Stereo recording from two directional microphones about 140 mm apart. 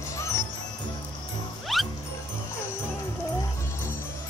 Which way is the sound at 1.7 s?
Centre (ahead or behind).